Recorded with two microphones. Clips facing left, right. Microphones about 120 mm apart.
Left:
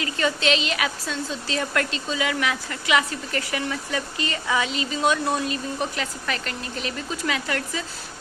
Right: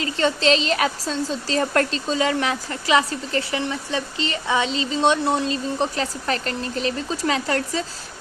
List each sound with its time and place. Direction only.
0.0 s a woman's voice: 30° right (ahead or behind)